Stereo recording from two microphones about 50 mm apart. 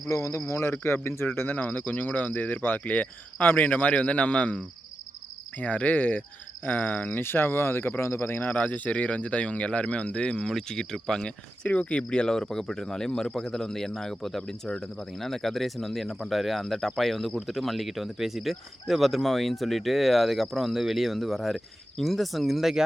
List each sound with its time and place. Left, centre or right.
0.1 s speech: left
1.0 s speech: left
1.5 s speech: left
8.0 s speech: left
8.5 s speech: left; by 11.7 s centre
11.7 s speech: left; by 22.8 s centre